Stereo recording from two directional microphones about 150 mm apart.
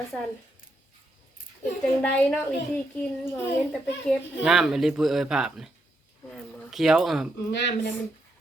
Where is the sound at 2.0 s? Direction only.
10° left (ahead or behind).